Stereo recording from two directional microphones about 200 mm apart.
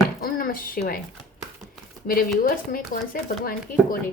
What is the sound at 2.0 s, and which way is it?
Speech, 45° left (ahead or behind).